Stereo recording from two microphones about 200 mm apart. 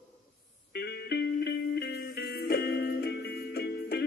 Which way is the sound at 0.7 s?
55° left (ahead or behind).